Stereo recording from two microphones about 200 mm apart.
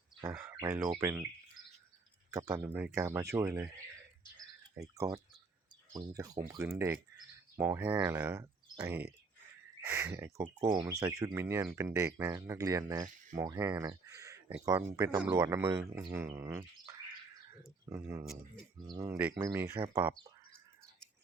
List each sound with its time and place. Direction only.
0.2 s speech: 15° right (ahead or behind)
2.3 s speech: 15° right (ahead or behind)
4.9 s speech: 15° right (ahead or behind)